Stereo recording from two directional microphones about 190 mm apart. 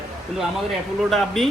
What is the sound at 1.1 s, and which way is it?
Speech, centre (ahead or behind).